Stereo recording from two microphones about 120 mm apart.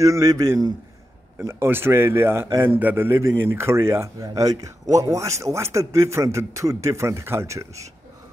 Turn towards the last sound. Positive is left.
turn(degrees=-25)  # may be behind; listen again after turning